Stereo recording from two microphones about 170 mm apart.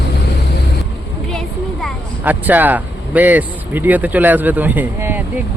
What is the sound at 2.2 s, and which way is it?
Speech, 10° right (ahead or behind).